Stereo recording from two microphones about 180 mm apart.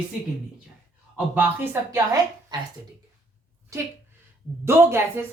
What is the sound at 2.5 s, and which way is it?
Speech, 25° right (ahead or behind).